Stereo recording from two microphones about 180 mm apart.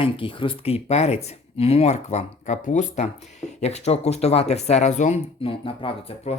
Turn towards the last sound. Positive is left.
turn(degrees=35)  # may be behind; listen again after turning